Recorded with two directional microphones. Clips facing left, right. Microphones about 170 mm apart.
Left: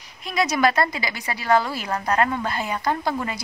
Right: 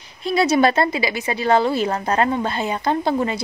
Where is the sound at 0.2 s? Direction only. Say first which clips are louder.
Right 5 dB; 30° right (ahead or behind).